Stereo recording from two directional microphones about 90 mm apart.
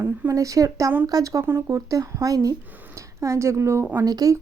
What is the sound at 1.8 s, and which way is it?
A woman's voice, 40° right (ahead or behind).